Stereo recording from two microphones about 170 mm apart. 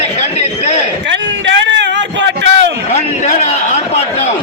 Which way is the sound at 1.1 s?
90° right.